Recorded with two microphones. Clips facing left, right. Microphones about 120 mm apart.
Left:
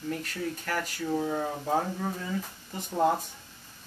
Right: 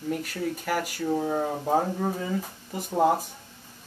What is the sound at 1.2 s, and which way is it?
Speech, 25° right (ahead or behind).